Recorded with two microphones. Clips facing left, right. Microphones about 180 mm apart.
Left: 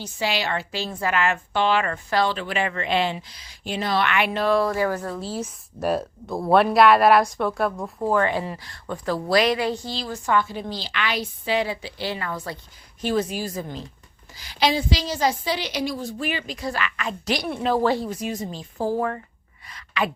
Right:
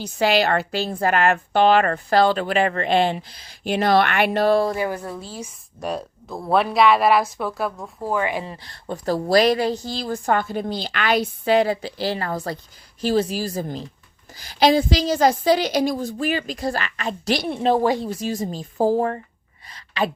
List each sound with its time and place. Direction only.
0.2 s a woman's voice: 55° right (ahead or behind); by 5.2 s 15° right (ahead or behind)
5.3 s a woman's voice: 5° left (ahead or behind); by 8.4 s 10° right (ahead or behind)
8.4 s a woman's voice: 30° right (ahead or behind)
18.5 s a woman's voice: 40° right (ahead or behind)
19.7 s a sound: 35° right (ahead or behind)